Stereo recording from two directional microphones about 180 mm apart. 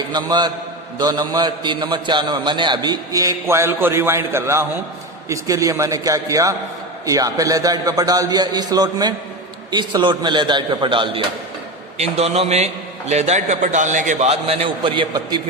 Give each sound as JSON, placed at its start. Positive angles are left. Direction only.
{"t": 0.1, "sound": "a man's voice", "side_deg": -25}